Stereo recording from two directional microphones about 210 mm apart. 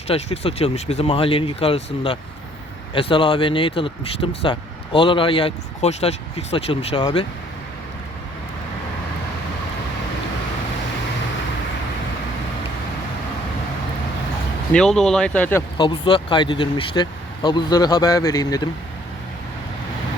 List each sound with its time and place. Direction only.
0.1 s speech: 25° left (ahead or behind)
14.7 s speech: centre (ahead or behind)
15.8 s speech: 25° left (ahead or behind)